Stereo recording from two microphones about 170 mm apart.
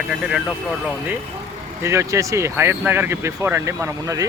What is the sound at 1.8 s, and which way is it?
Speech, 15° right (ahead or behind).